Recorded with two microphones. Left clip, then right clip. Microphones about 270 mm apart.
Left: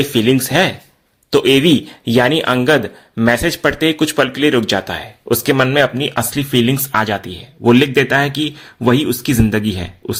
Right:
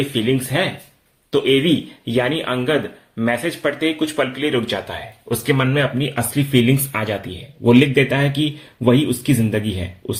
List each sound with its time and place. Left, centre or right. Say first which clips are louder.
0.1 s speech: left 6 dB; left